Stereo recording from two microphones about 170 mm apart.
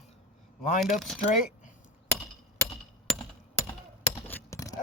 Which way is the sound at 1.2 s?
50° left (ahead or behind).